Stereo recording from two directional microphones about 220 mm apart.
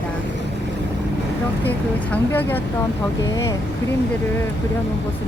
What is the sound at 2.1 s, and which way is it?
Speech, 10° left (ahead or behind).